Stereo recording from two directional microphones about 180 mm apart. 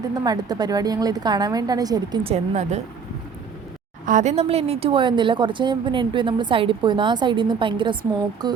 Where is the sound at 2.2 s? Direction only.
40° right (ahead or behind).